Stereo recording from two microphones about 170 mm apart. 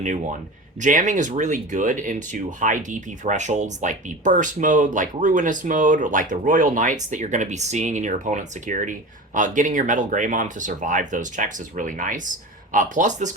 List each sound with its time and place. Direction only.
0.0 s speech: 45° right (ahead or behind)